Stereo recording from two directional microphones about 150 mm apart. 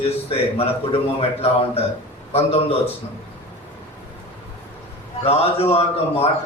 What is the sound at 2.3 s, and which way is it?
Speech, 40° left (ahead or behind).